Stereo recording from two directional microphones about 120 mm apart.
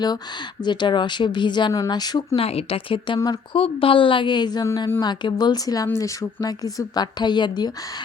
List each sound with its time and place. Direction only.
0.6 s a woman's voice: 40° left (ahead or behind)
2.3 s a woman's voice: 55° left (ahead or behind); by 7.7 s 40° left (ahead or behind)